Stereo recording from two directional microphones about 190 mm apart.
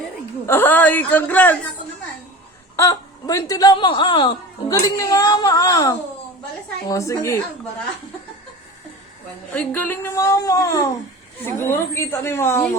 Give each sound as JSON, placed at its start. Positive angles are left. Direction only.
{"t": 0.4, "sound": "a woman's voice", "side_deg": 10}
{"t": 2.7, "sound": "a woman's voice", "side_deg": 15}
{"t": 9.6, "sound": "a woman's voice", "side_deg": 10}